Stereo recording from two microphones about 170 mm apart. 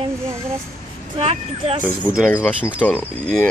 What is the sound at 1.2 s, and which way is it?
Speech, 40° right (ahead or behind).